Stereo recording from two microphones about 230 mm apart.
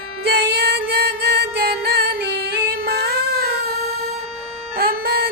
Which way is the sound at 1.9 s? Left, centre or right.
Right.